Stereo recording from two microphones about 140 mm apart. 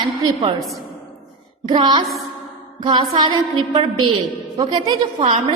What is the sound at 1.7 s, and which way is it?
A woman's voice, 35° right (ahead or behind).